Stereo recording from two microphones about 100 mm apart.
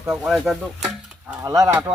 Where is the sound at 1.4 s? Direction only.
35° right (ahead or behind).